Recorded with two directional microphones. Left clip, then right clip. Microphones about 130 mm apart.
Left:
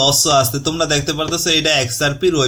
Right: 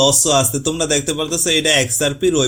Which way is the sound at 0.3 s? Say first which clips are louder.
Left 1 dB; 30° right (ahead or behind).